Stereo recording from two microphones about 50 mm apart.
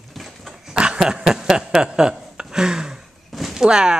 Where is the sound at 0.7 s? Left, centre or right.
Centre.